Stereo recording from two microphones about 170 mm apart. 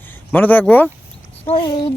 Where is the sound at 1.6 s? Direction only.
30° left (ahead or behind).